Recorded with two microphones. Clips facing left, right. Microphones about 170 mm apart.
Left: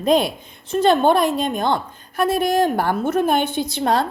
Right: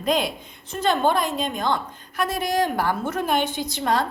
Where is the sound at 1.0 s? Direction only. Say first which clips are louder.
Left 5 dB; 65° left (ahead or behind).